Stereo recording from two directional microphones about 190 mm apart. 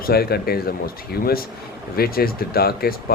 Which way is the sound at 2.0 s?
55° left (ahead or behind).